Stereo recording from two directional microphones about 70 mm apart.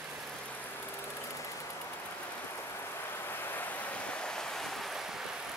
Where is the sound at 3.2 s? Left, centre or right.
Left; by 5.2 s centre.